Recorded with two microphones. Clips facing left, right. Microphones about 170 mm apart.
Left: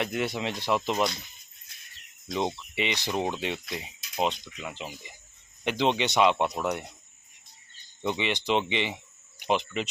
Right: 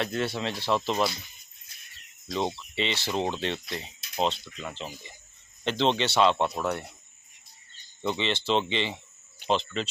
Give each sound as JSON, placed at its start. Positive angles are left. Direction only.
{"t": 0.0, "sound": "speech", "side_deg": 15}
{"t": 2.2, "sound": "speech", "side_deg": 20}
{"t": 8.0, "sound": "speech", "side_deg": 15}